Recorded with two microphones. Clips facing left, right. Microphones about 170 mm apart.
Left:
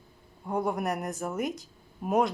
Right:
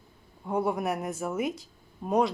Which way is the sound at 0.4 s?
Centre (ahead or behind).